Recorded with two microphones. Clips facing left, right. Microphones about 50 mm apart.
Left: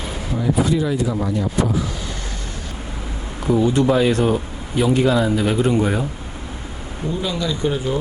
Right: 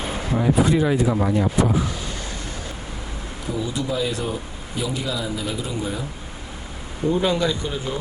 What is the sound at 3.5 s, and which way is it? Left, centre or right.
Speech, left.